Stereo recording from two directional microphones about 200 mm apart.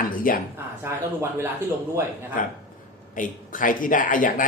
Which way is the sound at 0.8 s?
10° right (ahead or behind).